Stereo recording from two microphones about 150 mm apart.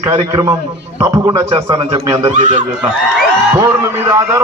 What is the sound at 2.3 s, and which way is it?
Speech, 55° right (ahead or behind).